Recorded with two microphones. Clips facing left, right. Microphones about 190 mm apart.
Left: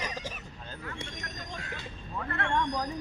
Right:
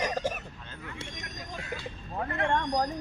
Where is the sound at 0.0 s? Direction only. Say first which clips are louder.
Right 8 dB; 50° right (ahead or behind).